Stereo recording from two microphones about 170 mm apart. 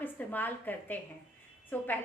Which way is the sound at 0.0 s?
10° left (ahead or behind).